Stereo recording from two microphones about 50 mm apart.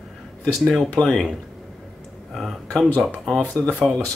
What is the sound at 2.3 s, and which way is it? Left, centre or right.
Speech, centre.